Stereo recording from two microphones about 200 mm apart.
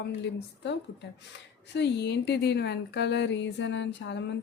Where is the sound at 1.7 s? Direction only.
60° left (ahead or behind).